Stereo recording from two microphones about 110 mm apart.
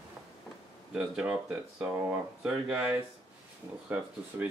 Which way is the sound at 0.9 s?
5° right (ahead or behind).